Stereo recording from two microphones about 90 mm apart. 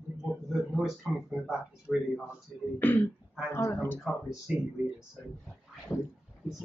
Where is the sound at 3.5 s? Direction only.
30° left (ahead or behind).